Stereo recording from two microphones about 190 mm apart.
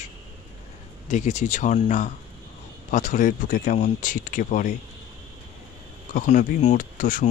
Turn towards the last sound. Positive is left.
turn(degrees=45)  # may be behind; listen again after turning